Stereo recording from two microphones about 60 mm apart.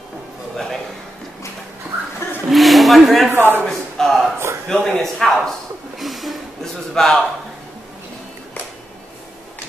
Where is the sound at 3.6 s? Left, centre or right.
Centre.